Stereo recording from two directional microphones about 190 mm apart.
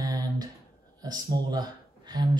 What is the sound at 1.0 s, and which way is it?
Speech, 20° right (ahead or behind).